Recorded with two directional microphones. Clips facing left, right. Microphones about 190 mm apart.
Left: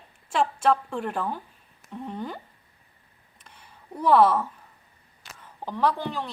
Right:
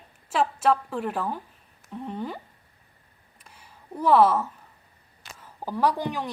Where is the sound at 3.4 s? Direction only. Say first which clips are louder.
Even; 5° right (ahead or behind).